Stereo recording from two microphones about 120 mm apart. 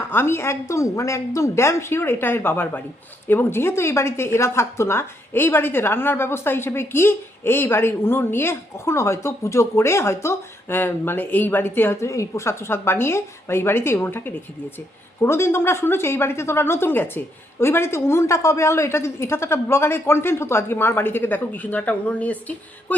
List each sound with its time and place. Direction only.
0.1 s speech: 20° left (ahead or behind)